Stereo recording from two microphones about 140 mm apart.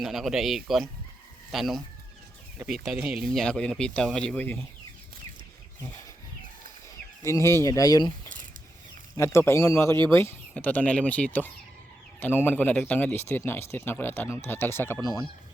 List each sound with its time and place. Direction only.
0.0 s speech: centre (ahead or behind)
2.8 s speech: 5° right (ahead or behind); by 4.6 s 10° left (ahead or behind)
7.2 s speech: 20° left (ahead or behind)
9.1 s speech: 20° left (ahead or behind)